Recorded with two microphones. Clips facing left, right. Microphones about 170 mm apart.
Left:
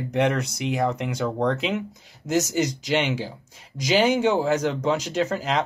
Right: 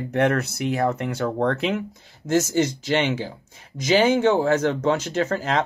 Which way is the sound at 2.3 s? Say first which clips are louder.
Right 2 dB; 10° left (ahead or behind).